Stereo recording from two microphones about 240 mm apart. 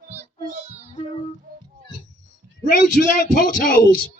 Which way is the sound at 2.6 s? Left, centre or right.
Left.